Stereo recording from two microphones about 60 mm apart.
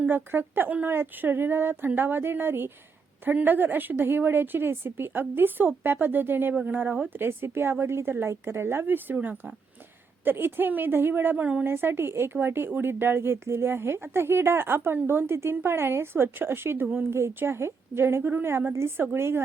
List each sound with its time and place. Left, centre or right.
0.1 s speech: right
7.2 s speech: right
10.2 s speech: right
17.2 s a woman's voice: right
18.2 s a woman's voice: right